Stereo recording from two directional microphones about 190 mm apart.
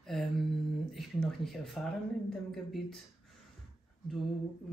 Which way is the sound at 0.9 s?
Centre (ahead or behind).